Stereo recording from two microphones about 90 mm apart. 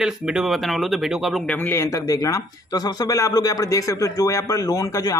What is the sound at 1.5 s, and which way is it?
Speech, 25° left (ahead or behind).